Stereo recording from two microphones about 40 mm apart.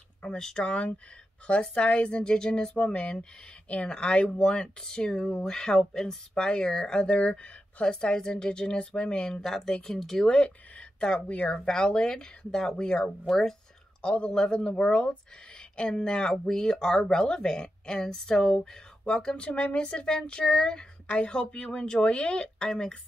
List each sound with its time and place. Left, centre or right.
0.4 s a woman's voice: centre
0.7 s a woman's voice: left
2.2 s speech: centre
2.7 s a woman's voice: left
11.1 s a woman's voice: left
11.5 s a woman's voice: centre
14.0 s a woman's voice: left